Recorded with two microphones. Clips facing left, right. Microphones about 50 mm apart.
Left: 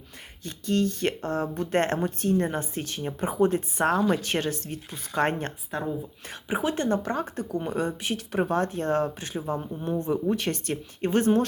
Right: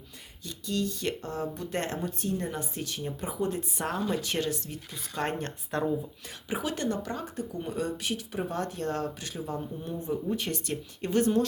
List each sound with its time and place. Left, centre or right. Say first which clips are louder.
0.4 s speech: left 6 dB; left
4.9 s speech: left 6 dB; left
7.8 s speech: even; left
8.1 s speech: left 6 dB; left
8.5 s speech: left 6 dB; left
10.0 s speech: left 4 dB; left
10.7 s speech: left 5 dB; left